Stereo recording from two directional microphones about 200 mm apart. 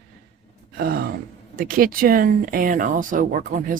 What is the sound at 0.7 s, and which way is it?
Speech, 45° right (ahead or behind).